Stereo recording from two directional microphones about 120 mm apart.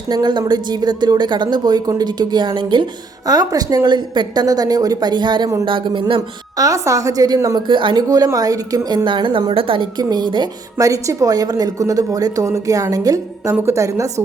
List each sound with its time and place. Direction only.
0.1 s speech: 35° right (ahead or behind)
6.6 s a woman's voice: 25° right (ahead or behind)
7.7 s speech: 45° right (ahead or behind)
8.0 s speech: 30° right (ahead or behind); by 9.8 s 45° right (ahead or behind)
10.0 s a woman's voice: 35° right (ahead or behind)